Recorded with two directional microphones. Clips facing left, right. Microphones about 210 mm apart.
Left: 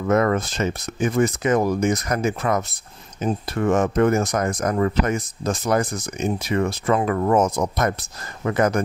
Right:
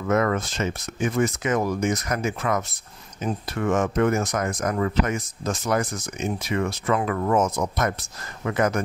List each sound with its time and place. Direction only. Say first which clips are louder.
0.1 s speech: left 3 dB; 35° left (ahead or behind)